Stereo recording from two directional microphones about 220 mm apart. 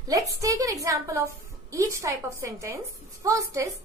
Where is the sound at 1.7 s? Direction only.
15° right (ahead or behind).